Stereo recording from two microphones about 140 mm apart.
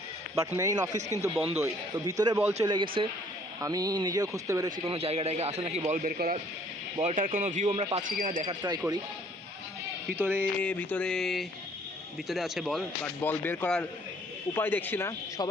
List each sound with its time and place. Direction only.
0.3 s speech: 25° right (ahead or behind)
2.6 s speech: 35° right (ahead or behind)
3.6 s speech: 25° right (ahead or behind)
4.8 s a man's voice: 45° right (ahead or behind); by 6.4 s 85° right
7.0 s speech: 60° right (ahead or behind)
8.0 s speech: 80° right
10.2 s a sound: 15° right (ahead or behind)
10.6 s speech: 10° left (ahead or behind)
13.2 s speech: 15° left (ahead or behind)